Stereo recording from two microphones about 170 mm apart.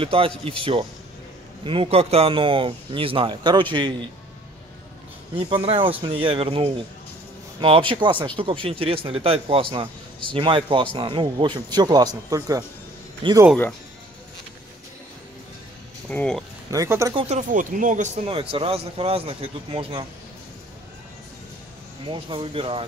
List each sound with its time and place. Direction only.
0.0 s a man's voice: 30° right (ahead or behind)
5.3 s a man's voice: 35° right (ahead or behind)
16.1 s speech: 5° left (ahead or behind)
16.7 s a man's voice: 20° right (ahead or behind)
17.1 s a man's voice: 30° right (ahead or behind)
17.4 s speech: 50° right (ahead or behind)
18.2 s a man's voice: 35° right (ahead or behind)
22.0 s a man's voice: 30° right (ahead or behind)